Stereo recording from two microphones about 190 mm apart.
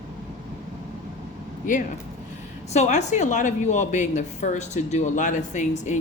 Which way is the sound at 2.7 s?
40° left (ahead or behind).